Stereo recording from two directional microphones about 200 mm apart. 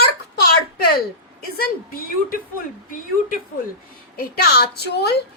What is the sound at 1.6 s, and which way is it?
Speech, 45° left (ahead or behind).